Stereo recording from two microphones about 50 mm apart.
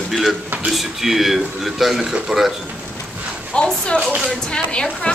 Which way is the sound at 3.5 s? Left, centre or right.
Centre.